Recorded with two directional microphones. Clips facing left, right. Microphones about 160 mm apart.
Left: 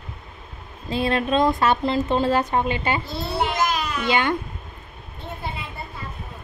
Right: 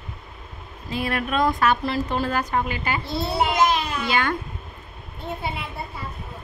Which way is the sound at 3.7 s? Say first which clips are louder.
Right 1 dB; 30° right (ahead or behind).